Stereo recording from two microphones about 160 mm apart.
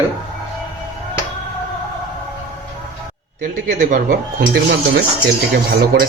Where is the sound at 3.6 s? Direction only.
60° right (ahead or behind).